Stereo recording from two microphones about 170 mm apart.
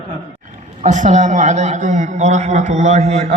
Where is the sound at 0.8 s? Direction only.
45° right (ahead or behind).